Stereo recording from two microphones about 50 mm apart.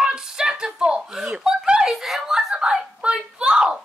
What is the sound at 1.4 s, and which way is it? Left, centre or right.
Snicker, centre.